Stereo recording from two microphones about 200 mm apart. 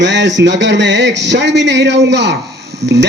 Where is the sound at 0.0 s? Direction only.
60° right (ahead or behind).